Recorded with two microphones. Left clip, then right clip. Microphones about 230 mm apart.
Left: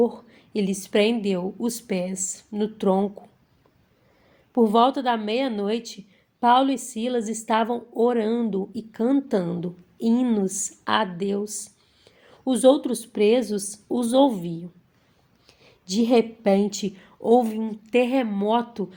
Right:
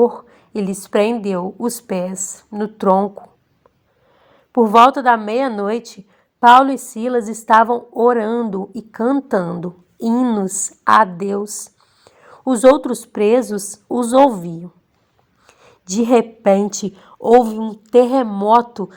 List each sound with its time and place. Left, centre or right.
0.0 s a woman's voice: right
4.5 s a woman's voice: right
15.6 s a woman's voice: right